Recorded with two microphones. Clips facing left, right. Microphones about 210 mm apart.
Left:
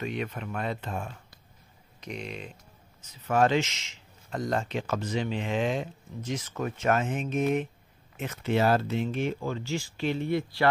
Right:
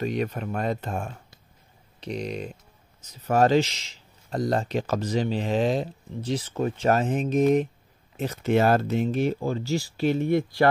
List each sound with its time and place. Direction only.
0.0 s speech: 40° right (ahead or behind)
8.5 s speech: 50° right (ahead or behind)